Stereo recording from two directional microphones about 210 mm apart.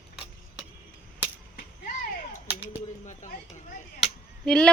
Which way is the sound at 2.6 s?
35° left (ahead or behind).